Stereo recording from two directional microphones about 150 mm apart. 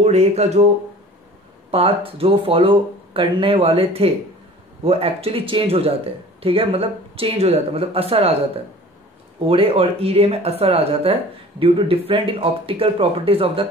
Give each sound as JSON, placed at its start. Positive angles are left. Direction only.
{"t": 0.0, "sound": "speech", "side_deg": -45}
{"t": 1.7, "sound": "speech", "side_deg": -40}
{"t": 9.5, "sound": "speech", "side_deg": -40}